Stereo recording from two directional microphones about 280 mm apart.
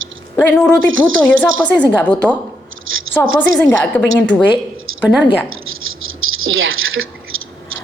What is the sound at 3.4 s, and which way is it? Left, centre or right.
A woman's voice, centre.